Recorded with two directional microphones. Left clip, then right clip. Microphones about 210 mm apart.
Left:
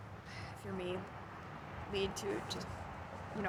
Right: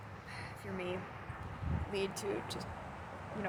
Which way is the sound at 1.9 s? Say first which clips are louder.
Even; 10° right (ahead or behind).